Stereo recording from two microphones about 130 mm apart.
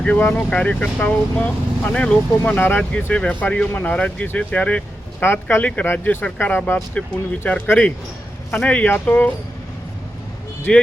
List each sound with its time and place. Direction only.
0.0 s speech: 10° left (ahead or behind)
10.7 s speech: 5° left (ahead or behind)